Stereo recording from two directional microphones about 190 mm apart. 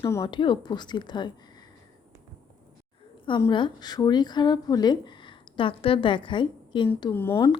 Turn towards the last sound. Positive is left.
turn(degrees=15)  # may be behind; listen again after turning